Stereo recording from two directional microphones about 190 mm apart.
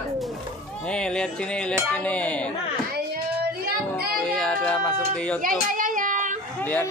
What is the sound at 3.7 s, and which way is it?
Child singing, 55° right (ahead or behind).